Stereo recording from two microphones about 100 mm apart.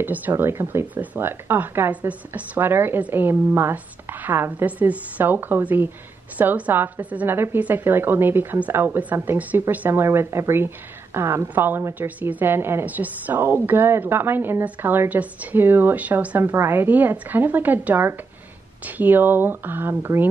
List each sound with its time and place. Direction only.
0.0 s a woman's voice: 20° right (ahead or behind)